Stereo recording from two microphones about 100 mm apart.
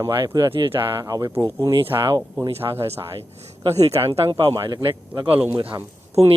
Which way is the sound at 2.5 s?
70° right (ahead or behind).